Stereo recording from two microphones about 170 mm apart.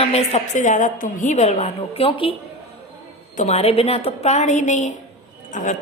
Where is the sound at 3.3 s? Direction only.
40° left (ahead or behind).